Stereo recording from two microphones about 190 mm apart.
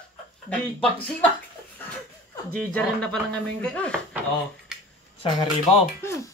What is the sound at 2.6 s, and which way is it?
Speech, 5° left (ahead or behind).